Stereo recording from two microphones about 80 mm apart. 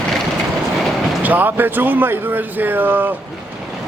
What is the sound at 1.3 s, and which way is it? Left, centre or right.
Speech, right.